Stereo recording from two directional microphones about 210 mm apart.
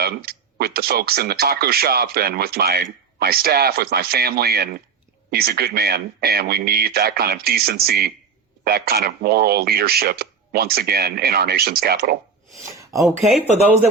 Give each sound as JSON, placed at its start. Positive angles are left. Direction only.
{"t": 0.0, "sound": "speech", "side_deg": -45}